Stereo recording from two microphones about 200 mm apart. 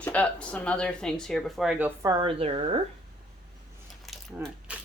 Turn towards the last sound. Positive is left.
turn(degrees=-5)  # may be behind; listen again after turning